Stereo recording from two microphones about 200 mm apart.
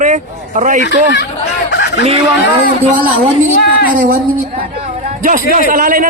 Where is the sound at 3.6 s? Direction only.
50° left (ahead or behind).